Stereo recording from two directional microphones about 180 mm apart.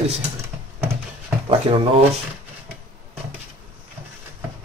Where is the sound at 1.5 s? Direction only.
30° right (ahead or behind).